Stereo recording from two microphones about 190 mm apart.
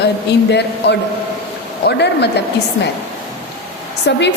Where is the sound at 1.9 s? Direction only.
60° left (ahead or behind).